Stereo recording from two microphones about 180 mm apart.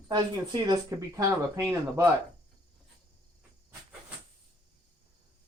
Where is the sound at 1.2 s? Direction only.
15° right (ahead or behind).